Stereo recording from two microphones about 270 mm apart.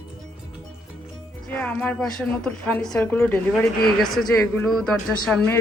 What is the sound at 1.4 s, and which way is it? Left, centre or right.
A woman's voice, centre.